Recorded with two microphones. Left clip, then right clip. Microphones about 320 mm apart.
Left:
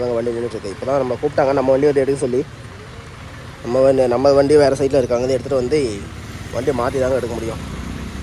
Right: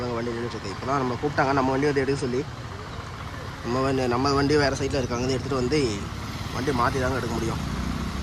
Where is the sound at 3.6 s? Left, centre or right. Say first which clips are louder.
Left 11 dB; centre.